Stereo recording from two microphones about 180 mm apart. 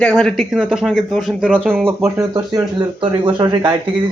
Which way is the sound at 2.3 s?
25° right (ahead or behind).